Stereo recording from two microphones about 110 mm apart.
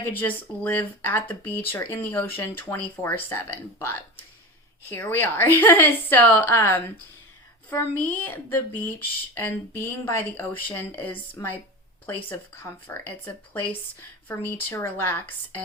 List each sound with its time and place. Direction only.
0.1 s a woman's voice: 15° left (ahead or behind)